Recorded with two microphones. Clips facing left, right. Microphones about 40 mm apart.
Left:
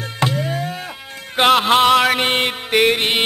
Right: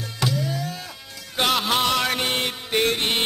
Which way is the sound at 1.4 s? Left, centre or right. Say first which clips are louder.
Left 8 dB; left.